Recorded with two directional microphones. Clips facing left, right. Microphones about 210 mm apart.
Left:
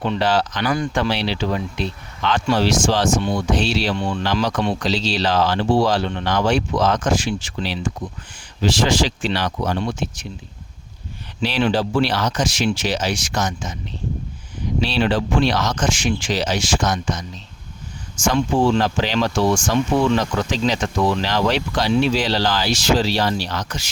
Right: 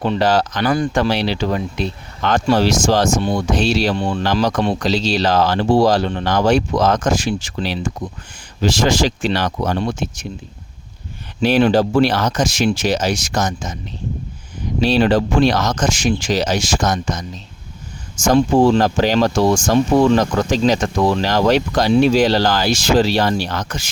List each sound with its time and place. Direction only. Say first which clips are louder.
0.0 s speech: right 3 dB; 40° right (ahead or behind)
11.3 s speech: right 6 dB; 45° right (ahead or behind)
14.8 s speech: right 6 dB; 45° right (ahead or behind)